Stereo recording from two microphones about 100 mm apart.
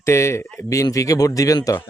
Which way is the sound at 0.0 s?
30° left (ahead or behind).